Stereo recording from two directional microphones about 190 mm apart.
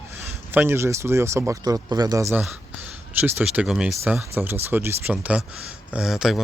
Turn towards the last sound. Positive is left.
turn(degrees=0)  # may be behind; listen again after turning